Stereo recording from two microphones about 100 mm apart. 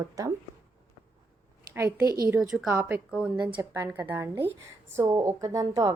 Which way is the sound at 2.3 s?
5° right (ahead or behind).